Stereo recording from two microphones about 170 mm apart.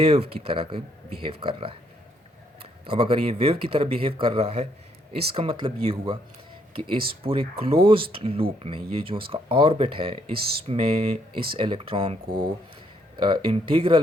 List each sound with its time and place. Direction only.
0.0 s speech: 35° right (ahead or behind)
2.8 s speech: 30° right (ahead or behind)